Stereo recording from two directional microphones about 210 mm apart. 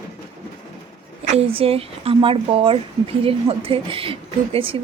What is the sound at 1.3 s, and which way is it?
Speech, 25° right (ahead or behind).